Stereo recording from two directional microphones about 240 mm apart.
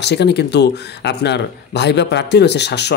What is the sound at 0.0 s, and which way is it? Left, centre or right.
Speech, left.